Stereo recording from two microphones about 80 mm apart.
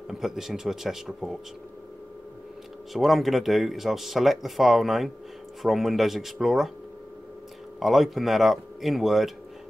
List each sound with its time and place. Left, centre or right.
0.1 s speech: centre
2.9 s speech: centre
7.8 s speech: centre